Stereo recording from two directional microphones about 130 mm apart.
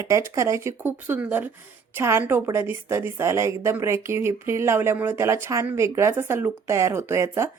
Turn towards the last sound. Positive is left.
turn(degrees=-20)  # may be behind; listen again after turning